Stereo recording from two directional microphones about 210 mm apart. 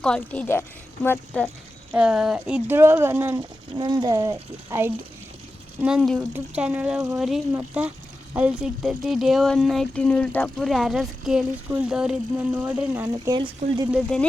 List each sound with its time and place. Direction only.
0.0 s a woman's voice: 5° left (ahead or behind)
1.9 s a woman's voice: 5° right (ahead or behind)
13.3 s a woman's voice: 20° right (ahead or behind)
13.9 s speech: 5° left (ahead or behind)